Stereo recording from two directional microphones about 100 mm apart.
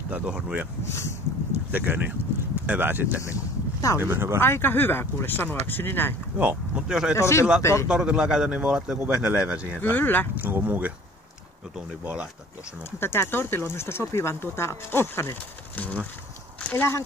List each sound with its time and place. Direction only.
0.1 s a man's voice: 10° right (ahead or behind)
0.8 s speech: 25° left (ahead or behind)
1.5 s speech: 20° right (ahead or behind)
3.2 s a sound: 30° left (ahead or behind)
4.0 s speech: 25° right (ahead or behind)
4.4 s speech: 25° left (ahead or behind)
6.3 s a man's voice: 15° right (ahead or behind)
7.2 s speech: 30° left (ahead or behind)
7.9 s a man's voice: 5° right (ahead or behind)
9.8 s speech: 20° left (ahead or behind)
10.3 s a man's voice: 15° right (ahead or behind)
13.0 s speech: 25° left (ahead or behind)